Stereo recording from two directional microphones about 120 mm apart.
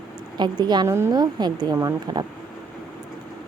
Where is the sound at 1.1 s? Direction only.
35° right (ahead or behind).